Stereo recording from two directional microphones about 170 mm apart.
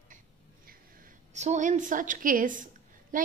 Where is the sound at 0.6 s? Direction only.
55° right (ahead or behind).